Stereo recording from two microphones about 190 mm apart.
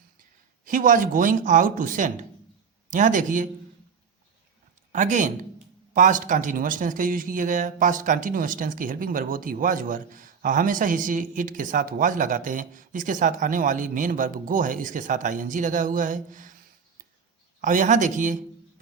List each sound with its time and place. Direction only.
0.6 s a man's voice: 45° right (ahead or behind)
4.9 s a man's voice: 40° right (ahead or behind)
17.6 s speech: 40° right (ahead or behind)